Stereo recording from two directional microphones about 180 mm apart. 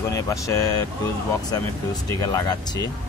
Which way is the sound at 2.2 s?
20° left (ahead or behind).